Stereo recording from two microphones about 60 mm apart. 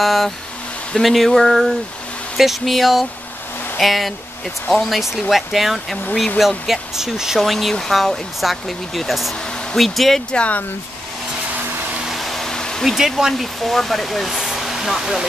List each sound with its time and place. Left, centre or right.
0.0 s speech: centre
10.3 s speech: left
12.0 s a sound: centre
12.8 s speech: centre